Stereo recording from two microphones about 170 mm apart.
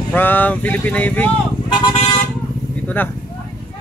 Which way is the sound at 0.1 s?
10° left (ahead or behind).